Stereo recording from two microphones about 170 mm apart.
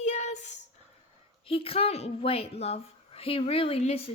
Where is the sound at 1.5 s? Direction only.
35° left (ahead or behind).